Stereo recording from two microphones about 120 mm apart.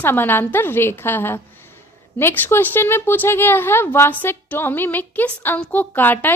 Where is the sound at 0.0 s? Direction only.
15° left (ahead or behind).